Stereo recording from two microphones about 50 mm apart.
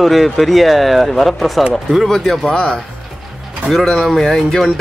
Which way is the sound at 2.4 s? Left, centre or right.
Centre.